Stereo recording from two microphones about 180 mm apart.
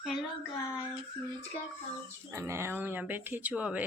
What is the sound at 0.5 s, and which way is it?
Speech, 15° left (ahead or behind).